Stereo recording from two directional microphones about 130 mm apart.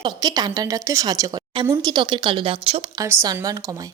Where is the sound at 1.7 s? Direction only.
35° right (ahead or behind).